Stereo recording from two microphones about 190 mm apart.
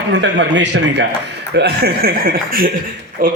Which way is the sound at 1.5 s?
55° right (ahead or behind).